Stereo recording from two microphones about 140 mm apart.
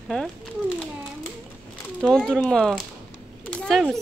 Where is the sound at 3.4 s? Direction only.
5° left (ahead or behind).